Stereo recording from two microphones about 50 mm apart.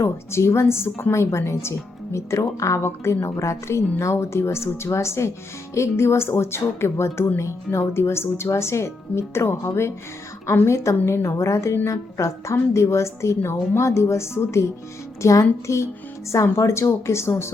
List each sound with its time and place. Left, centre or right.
0.0 s speech: left
1.1 s a woman's voice: left
2.1 s a woman's voice: left
2.8 s a woman's voice: left
11.9 s speech: left
12.7 s a woman's voice: left
15.2 s a woman's voice: left